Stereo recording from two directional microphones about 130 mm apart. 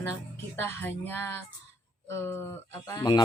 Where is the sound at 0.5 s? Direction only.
15° left (ahead or behind).